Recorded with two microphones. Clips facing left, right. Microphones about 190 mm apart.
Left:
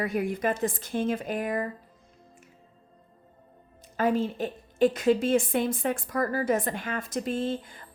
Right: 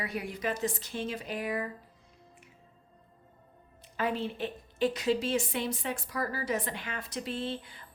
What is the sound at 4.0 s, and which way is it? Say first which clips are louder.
A woman's voice: left 6 dB; 45° left (ahead or behind).